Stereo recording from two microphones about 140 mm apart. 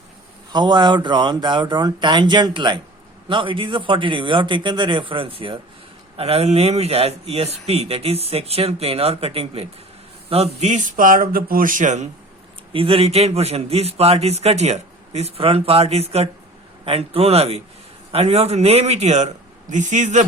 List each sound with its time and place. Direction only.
0.5 s a man's voice: 30° right (ahead or behind); by 12.0 s 65° right (ahead or behind)
12.7 s a man's voice: 40° right (ahead or behind); by 20.2 s 55° right (ahead or behind)